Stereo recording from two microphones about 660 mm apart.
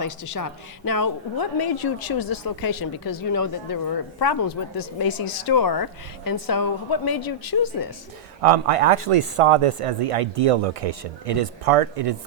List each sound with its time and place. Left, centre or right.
0.0 s a woman's voice: left
8.4 s speech: right